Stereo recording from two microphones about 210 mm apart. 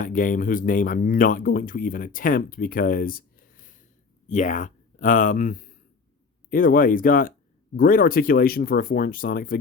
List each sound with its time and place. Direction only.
0.0 s speech: 40° left (ahead or behind)